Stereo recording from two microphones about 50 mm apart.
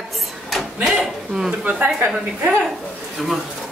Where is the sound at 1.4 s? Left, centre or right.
Right.